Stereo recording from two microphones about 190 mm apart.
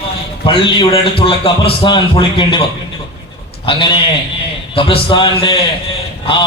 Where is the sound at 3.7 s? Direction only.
25° left (ahead or behind).